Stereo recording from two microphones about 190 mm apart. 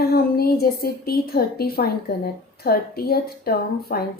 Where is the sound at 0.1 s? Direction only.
55° left (ahead or behind).